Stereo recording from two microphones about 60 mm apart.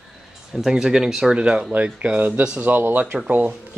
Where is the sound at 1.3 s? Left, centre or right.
Centre.